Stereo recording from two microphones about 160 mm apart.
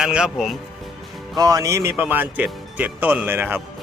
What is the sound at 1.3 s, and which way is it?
Speech, 25° right (ahead or behind).